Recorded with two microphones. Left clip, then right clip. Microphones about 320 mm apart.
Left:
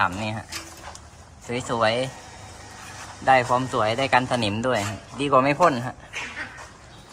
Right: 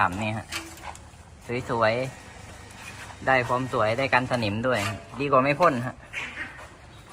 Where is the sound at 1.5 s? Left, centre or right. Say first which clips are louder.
Left 1 dB; centre.